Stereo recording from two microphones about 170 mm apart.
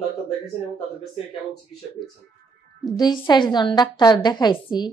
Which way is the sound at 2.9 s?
25° left (ahead or behind).